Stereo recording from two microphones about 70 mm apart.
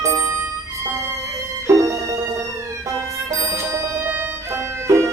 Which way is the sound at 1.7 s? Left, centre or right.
Right.